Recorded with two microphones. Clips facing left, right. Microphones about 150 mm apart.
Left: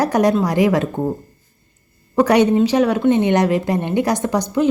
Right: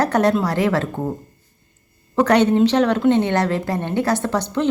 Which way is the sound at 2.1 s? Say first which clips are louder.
Left 1 dB; 10° left (ahead or behind).